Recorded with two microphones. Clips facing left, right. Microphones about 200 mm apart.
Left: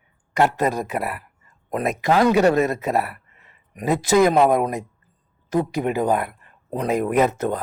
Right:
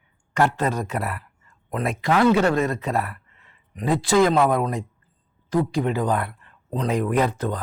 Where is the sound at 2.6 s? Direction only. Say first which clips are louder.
Left 3 dB; 15° left (ahead or behind).